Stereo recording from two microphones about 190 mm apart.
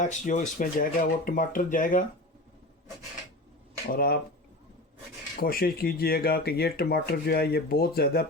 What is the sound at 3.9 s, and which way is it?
Speech, 50° left (ahead or behind).